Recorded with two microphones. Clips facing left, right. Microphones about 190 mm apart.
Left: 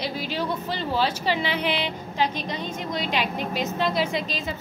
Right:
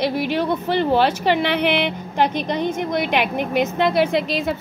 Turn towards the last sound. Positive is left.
turn(degrees=-65)  # may be behind; listen again after turning